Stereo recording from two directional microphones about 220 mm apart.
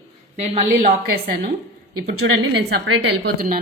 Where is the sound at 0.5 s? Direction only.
35° right (ahead or behind).